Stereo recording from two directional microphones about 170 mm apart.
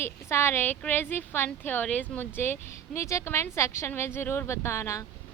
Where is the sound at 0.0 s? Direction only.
15° left (ahead or behind).